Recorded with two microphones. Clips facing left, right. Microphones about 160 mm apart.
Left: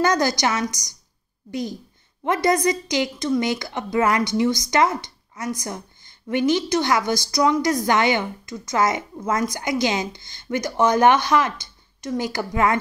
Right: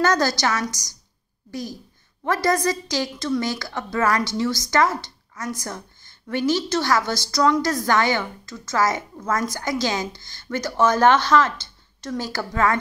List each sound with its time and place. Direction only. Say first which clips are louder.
0.0 s a woman's voice: left 1 dB; 15° left (ahead or behind)